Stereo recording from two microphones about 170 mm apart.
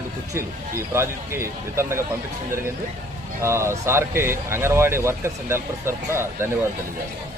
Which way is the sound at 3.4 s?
15° right (ahead or behind).